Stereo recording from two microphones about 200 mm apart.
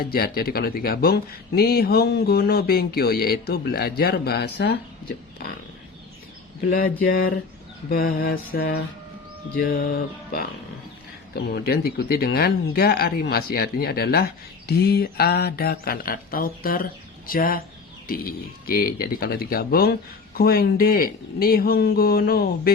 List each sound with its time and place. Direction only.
0.0 s speech: 50° left (ahead or behind)
6.7 s speech: 45° left (ahead or behind)
11.3 s speech: 55° left (ahead or behind)